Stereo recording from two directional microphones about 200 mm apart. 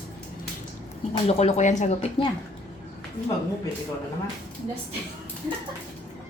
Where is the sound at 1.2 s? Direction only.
30° left (ahead or behind).